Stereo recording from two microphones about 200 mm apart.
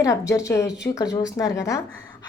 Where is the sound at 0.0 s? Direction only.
15° left (ahead or behind).